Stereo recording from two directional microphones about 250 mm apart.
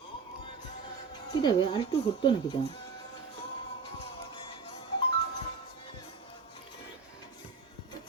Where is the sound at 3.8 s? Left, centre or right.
Centre.